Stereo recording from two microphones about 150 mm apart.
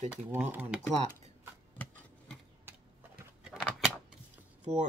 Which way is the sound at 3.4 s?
5° right (ahead or behind).